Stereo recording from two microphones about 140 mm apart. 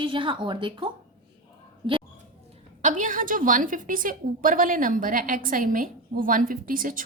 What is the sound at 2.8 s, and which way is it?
A woman's voice, 65° right (ahead or behind).